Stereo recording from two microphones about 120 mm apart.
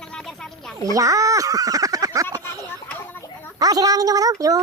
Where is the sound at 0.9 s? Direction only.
30° right (ahead or behind).